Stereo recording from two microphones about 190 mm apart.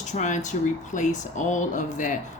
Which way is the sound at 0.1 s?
40° left (ahead or behind).